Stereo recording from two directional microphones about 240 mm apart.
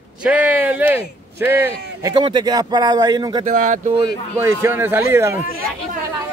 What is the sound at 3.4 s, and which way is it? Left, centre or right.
Speech, right.